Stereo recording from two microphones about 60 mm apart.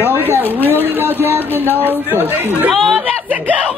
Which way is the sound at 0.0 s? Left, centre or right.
Right.